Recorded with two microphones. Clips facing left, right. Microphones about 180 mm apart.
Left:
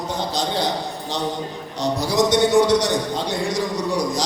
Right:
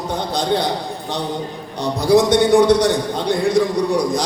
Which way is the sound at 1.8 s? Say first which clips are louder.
Right 5 dB; 55° right (ahead or behind).